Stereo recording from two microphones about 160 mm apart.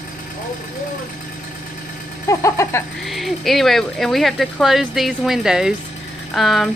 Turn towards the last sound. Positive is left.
turn(degrees=0)  # may be behind; listen again after turning